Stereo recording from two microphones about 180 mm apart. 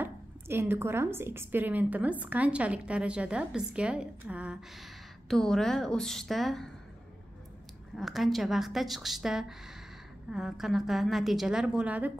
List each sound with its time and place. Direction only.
0.0 s a woman's voice: 10° right (ahead or behind)
7.9 s a woman's voice: centre (ahead or behind)